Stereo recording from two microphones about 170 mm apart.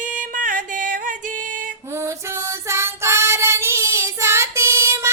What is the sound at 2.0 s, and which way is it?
Female singing, 15° right (ahead or behind).